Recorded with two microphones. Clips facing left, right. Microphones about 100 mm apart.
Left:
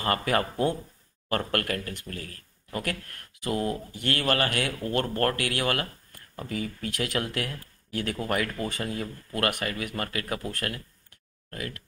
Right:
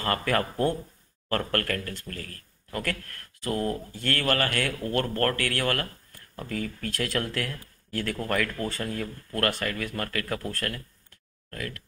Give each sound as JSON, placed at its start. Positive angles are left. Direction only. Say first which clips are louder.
{"t": 0.0, "sound": "speech", "louder": "even", "side_deg": 20}